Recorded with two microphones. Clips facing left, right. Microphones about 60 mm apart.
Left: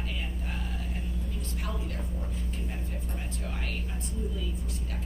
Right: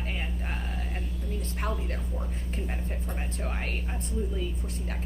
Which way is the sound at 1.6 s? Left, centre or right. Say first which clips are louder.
Right 3 dB; right.